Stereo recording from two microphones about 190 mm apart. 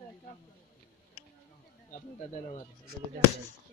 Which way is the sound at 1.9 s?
40° left (ahead or behind).